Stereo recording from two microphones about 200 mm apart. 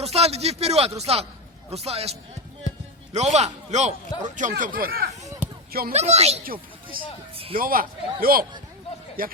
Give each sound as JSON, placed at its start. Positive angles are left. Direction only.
{"t": 0.0, "sound": "a man's voice", "side_deg": -30}
{"t": 5.2, "sound": "basketball bounce", "side_deg": -15}
{"t": 5.9, "sound": "a man's voice", "side_deg": -35}
{"t": 7.0, "sound": "speech", "side_deg": -45}
{"t": 7.3, "sound": "music", "side_deg": -30}
{"t": 7.6, "sound": "speech", "side_deg": -45}